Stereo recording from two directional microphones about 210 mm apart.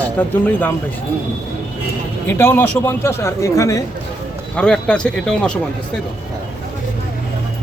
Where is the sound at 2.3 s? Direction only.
10° left (ahead or behind).